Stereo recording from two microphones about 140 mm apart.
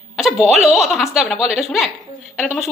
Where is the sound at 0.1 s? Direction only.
Centre (ahead or behind).